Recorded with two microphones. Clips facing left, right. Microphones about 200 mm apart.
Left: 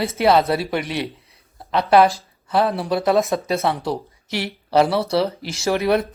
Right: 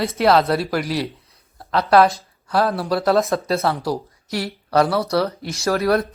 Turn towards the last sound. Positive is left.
turn(degrees=0)  # may be behind; listen again after turning